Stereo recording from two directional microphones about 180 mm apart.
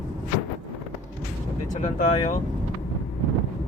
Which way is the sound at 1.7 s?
45° left (ahead or behind).